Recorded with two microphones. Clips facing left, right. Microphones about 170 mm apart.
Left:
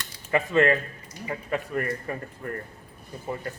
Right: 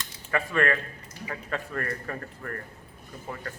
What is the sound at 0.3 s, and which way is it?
A man's voice, 20° left (ahead or behind).